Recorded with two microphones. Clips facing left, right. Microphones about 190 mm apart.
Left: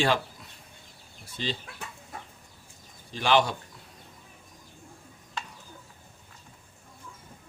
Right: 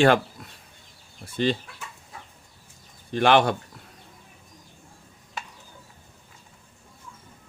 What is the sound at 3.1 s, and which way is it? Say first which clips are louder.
Speech: right 5 dB; 60° right (ahead or behind).